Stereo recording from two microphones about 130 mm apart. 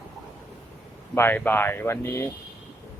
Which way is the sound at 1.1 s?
15° left (ahead or behind).